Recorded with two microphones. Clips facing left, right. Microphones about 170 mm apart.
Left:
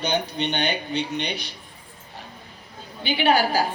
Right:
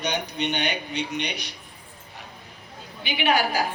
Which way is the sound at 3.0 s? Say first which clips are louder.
Left 3 dB; 30° left (ahead or behind).